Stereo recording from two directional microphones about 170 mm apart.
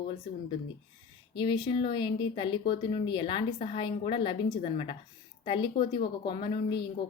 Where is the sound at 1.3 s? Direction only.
25° left (ahead or behind).